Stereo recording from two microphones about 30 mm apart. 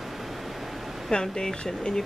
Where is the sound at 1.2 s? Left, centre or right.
Centre.